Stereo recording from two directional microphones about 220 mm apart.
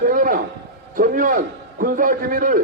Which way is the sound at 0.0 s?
40° right (ahead or behind).